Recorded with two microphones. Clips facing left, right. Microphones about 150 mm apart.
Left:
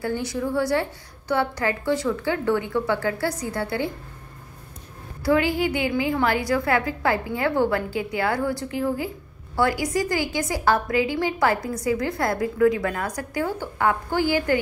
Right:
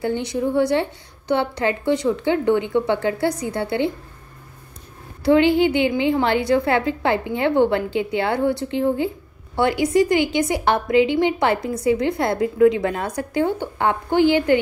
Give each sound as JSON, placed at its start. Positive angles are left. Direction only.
{"t": 0.0, "sound": "a woman's voice", "side_deg": -20}
{"t": 5.2, "sound": "a woman's voice", "side_deg": -25}